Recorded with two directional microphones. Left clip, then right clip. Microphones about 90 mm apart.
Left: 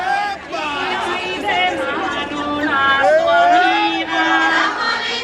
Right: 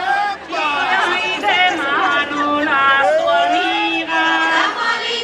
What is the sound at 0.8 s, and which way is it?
Chatter, 20° right (ahead or behind).